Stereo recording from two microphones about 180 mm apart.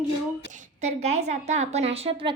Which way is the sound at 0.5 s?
40° right (ahead or behind).